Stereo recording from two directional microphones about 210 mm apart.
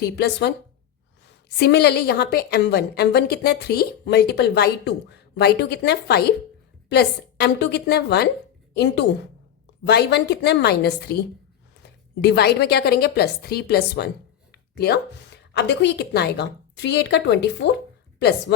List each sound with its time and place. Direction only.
0.0 s a woman's voice: 50° left (ahead or behind)
1.5 s a woman's voice: 50° left (ahead or behind)
12.2 s a woman's voice: 50° left (ahead or behind)
15.5 s a woman's voice: 55° left (ahead or behind)